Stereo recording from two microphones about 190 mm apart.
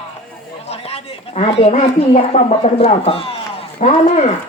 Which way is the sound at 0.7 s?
35° left (ahead or behind).